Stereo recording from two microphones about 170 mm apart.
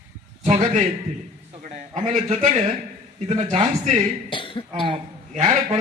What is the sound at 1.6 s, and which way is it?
Speech, 50° right (ahead or behind).